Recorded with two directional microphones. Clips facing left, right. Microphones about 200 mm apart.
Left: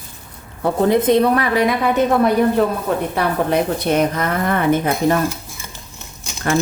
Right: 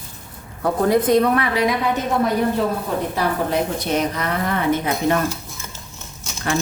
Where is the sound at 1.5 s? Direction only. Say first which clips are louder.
Left 3 dB; 60° left (ahead or behind).